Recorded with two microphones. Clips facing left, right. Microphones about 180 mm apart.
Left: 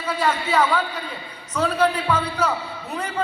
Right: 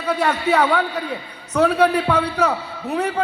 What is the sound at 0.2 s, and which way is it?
Speech, 65° right (ahead or behind).